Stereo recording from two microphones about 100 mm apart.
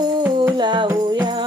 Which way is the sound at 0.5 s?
50° right (ahead or behind).